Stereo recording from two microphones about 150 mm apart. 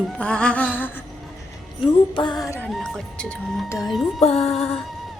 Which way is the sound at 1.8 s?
35° left (ahead or behind).